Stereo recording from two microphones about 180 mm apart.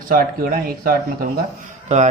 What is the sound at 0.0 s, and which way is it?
Speech, 55° right (ahead or behind).